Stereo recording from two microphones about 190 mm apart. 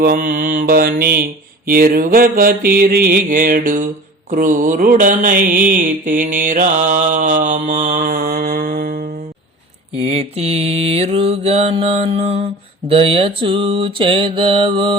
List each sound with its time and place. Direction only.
0.0 s mantra: 50° right (ahead or behind)
10.1 s mantra: 30° right (ahead or behind)